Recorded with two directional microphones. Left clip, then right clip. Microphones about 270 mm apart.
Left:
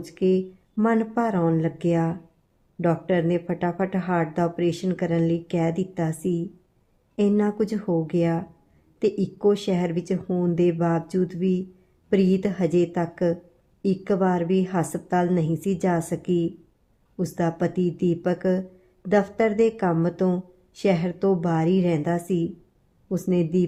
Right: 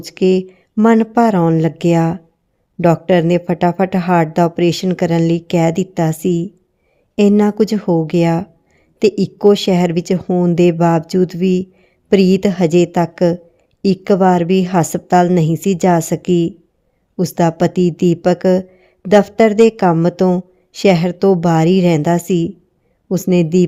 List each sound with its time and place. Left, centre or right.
0.0 s speech: right